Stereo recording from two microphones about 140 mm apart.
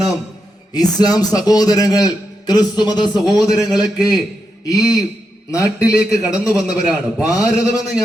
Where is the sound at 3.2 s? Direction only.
Centre (ahead or behind).